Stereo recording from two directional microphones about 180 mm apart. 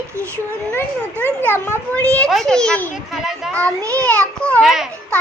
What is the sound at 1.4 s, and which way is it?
A child's voice, 10° left (ahead or behind).